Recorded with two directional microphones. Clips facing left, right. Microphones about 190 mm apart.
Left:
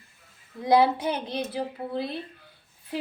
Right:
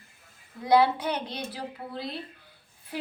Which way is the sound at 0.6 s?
25° left (ahead or behind).